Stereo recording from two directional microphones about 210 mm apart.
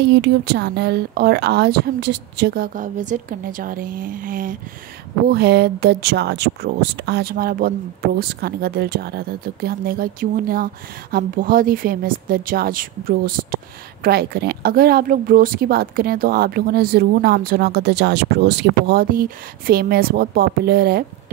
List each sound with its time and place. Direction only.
0.0 s speech: 50° right (ahead or behind)